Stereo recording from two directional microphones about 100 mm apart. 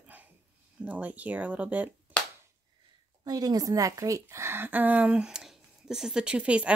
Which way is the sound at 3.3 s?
40° right (ahead or behind).